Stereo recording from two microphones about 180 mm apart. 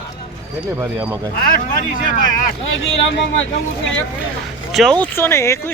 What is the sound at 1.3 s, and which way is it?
Speech, 50° left (ahead or behind).